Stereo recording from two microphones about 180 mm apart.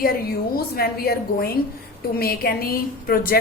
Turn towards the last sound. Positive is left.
turn(degrees=55)  # may be behind; listen again after turning